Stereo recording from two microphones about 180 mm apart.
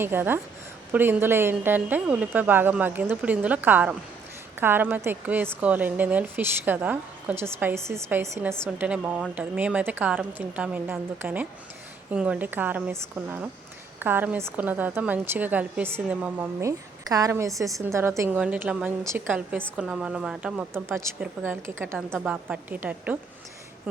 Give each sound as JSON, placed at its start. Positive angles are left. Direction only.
{"t": 0.0, "sound": "a woman's voice", "side_deg": -10}